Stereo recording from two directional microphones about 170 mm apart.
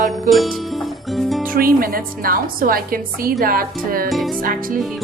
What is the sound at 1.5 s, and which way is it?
A woman's voice, 60° right (ahead or behind).